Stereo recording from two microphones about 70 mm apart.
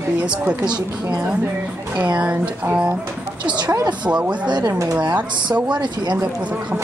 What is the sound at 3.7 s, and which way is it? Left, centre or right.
Speech, right.